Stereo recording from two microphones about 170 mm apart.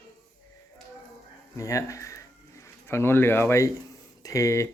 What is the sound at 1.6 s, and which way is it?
Speech, 20° left (ahead or behind).